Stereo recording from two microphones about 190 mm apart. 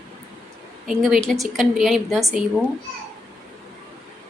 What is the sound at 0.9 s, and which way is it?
A woman's voice, centre (ahead or behind).